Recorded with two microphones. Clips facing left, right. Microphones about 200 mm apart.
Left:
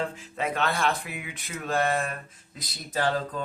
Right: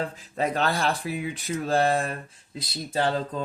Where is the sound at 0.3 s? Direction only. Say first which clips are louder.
Right 3 dB; 35° right (ahead or behind).